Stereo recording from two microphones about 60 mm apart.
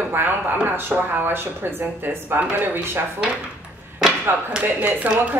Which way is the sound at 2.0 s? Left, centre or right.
Right.